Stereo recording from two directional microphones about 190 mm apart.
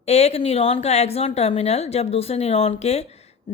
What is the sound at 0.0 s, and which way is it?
A woman's voice, 35° left (ahead or behind).